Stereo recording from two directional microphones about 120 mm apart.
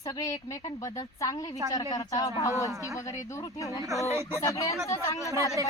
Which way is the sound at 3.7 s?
25° right (ahead or behind).